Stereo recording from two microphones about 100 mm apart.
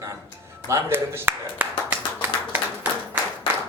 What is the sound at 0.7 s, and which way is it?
Clapping, 25° right (ahead or behind).